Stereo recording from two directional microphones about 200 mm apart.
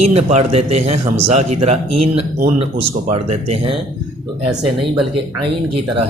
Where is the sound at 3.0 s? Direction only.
30° right (ahead or behind).